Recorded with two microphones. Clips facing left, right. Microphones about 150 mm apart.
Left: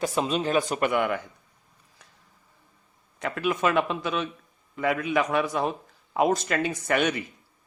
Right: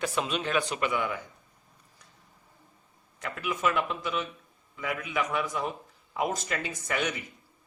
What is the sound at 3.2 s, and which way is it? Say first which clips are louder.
Speech: left 5 dB; 65° left (ahead or behind).